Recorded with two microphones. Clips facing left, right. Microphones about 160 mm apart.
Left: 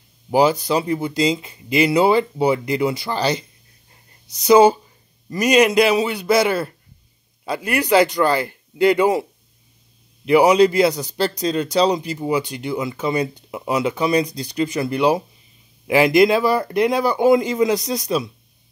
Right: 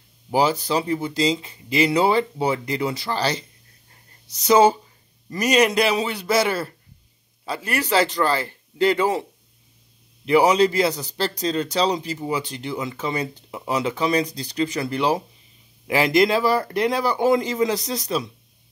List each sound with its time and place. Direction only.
0.3 s a man's voice: 15° left (ahead or behind)
10.2 s a man's voice: 15° left (ahead or behind)